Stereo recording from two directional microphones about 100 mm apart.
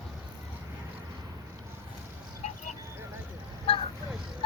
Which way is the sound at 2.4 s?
90° left.